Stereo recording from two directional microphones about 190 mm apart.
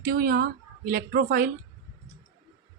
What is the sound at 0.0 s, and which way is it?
A woman's voice, 50° right (ahead or behind).